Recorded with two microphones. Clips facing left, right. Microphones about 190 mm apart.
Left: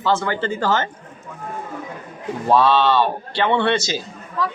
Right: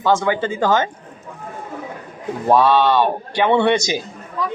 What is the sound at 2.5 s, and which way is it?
Speech, 15° right (ahead or behind).